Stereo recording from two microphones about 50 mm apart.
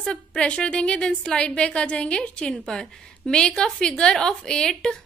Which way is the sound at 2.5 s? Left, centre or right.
Centre.